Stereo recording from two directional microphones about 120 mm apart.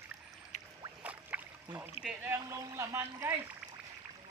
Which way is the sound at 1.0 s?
15° right (ahead or behind).